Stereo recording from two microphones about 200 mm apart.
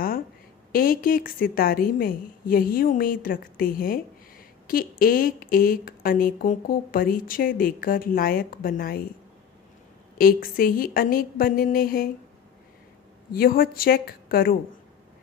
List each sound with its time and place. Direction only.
0.7 s speech: 45° left (ahead or behind)
10.1 s speech: 45° left (ahead or behind)
13.3 s speech: 45° left (ahead or behind)